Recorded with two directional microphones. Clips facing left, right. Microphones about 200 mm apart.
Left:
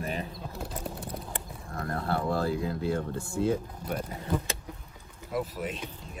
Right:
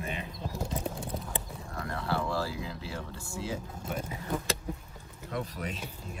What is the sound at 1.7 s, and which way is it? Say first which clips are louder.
Speech: left 2 dB; 50° left (ahead or behind).